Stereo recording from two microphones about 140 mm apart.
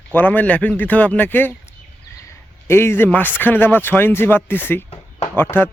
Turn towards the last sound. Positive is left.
turn(degrees=15)  # may be behind; listen again after turning